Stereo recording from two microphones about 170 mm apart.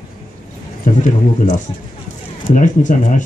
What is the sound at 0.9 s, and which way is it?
Speech, 50° left (ahead or behind).